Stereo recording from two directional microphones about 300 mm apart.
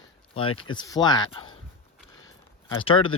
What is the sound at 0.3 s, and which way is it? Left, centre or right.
Speech, centre.